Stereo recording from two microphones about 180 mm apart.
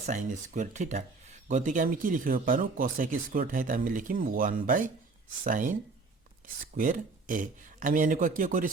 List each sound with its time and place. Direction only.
0.0 s speech: 40° right (ahead or behind)
6.7 s speech: 45° right (ahead or behind)